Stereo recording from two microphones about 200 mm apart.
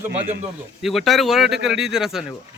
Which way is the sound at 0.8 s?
Centre (ahead or behind).